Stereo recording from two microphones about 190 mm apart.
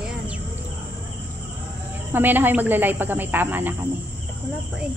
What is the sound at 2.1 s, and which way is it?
Speech, 10° right (ahead or behind).